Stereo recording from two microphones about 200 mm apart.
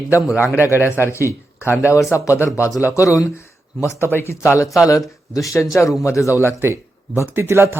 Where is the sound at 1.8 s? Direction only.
15° left (ahead or behind).